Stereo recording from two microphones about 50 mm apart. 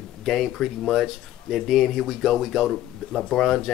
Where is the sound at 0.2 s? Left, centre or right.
Centre.